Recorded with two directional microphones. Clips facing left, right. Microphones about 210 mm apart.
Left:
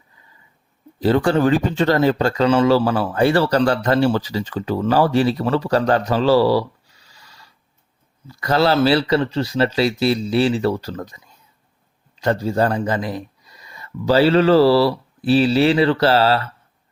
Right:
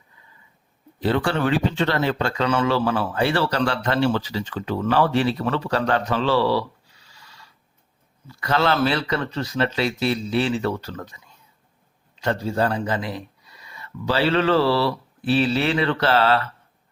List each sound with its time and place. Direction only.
0.9 s speech: 40° left (ahead or behind)
8.3 s speech: 40° left (ahead or behind)
12.2 s speech: 40° left (ahead or behind)